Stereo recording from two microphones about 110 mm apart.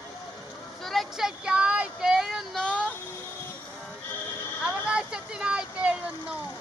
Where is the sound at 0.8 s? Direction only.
Centre (ahead or behind).